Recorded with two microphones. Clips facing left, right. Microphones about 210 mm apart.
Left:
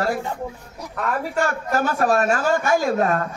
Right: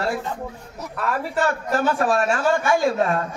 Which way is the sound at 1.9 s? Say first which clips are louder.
Left 1 dB; 40° left (ahead or behind).